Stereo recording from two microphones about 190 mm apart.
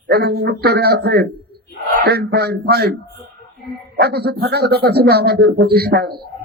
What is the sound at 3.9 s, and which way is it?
A man's voice, 55° right (ahead or behind).